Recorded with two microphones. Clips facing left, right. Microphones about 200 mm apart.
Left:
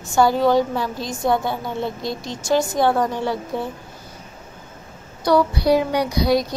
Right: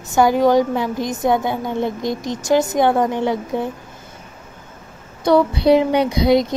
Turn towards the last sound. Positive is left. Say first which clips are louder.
# right 4 dB
turn(degrees=-25)  # may be behind; listen again after turning